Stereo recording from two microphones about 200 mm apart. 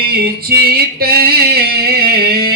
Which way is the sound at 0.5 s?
50° right (ahead or behind).